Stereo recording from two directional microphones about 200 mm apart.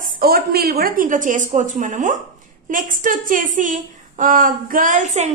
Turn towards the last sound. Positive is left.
turn(degrees=-35)  # may be behind; listen again after turning